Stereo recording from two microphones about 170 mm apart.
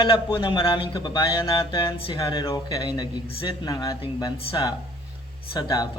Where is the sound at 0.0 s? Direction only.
30° left (ahead or behind).